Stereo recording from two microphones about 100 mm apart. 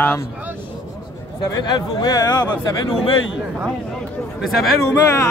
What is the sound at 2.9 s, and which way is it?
Speech, 70° left (ahead or behind).